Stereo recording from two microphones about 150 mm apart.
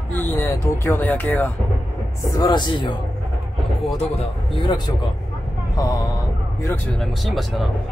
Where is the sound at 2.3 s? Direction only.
25° left (ahead or behind).